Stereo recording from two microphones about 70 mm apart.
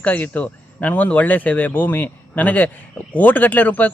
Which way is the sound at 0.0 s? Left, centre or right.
Left.